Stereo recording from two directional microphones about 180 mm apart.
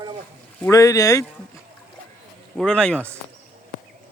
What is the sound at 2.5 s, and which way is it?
Speech, 5° left (ahead or behind).